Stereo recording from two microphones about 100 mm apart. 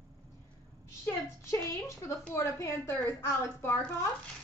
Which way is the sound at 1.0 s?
30° left (ahead or behind).